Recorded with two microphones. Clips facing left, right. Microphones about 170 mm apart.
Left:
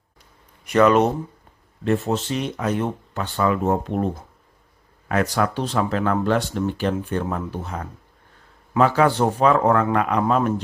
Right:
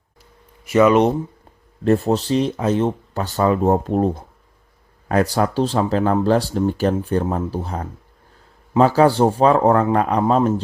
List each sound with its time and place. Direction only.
0.6 s speech: 5° right (ahead or behind)
1.8 s speech: 40° right (ahead or behind)